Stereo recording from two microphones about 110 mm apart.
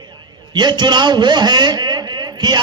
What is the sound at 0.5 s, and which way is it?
A man's voice, 40° right (ahead or behind).